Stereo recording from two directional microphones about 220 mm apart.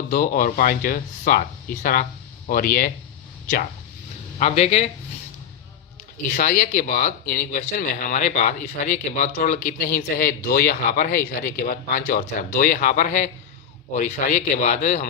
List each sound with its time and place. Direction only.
0.1 s speech: 40° left (ahead or behind)
4.4 s speech: 30° left (ahead or behind)
6.3 s speech: 35° left (ahead or behind)